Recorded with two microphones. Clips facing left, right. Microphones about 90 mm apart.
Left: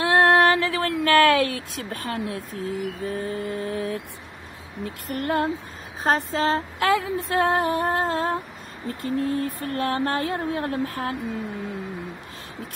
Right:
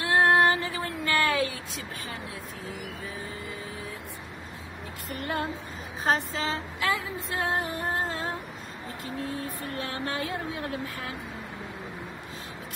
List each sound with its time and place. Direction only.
0.0 s a sound: 70° left (ahead or behind)
3.1 s female singing: 55° left (ahead or behind)
5.0 s female singing: 55° left (ahead or behind)
6.0 s female singing: 45° left (ahead or behind); by 8.4 s 60° left (ahead or behind)
9.0 s speech: 55° left (ahead or behind)